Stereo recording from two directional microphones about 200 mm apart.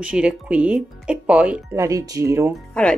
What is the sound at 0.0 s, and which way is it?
Speech, 5° right (ahead or behind).